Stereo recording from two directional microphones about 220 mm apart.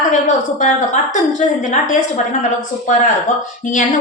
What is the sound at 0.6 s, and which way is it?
A woman's voice, 35° left (ahead or behind).